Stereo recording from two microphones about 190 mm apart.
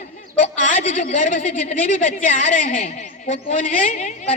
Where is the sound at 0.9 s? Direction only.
40° left (ahead or behind).